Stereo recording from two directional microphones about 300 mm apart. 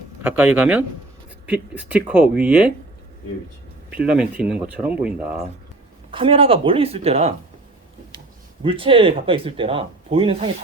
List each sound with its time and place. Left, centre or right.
0.2 s speech: centre
3.9 s speech: centre
6.1 s speech: centre
8.6 s speech: centre